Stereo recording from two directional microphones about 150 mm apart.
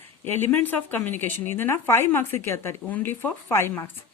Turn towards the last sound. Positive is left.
turn(degrees=15)  # may be behind; listen again after turning